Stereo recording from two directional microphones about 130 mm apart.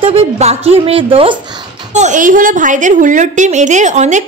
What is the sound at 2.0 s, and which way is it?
A woman's voice, 80° right.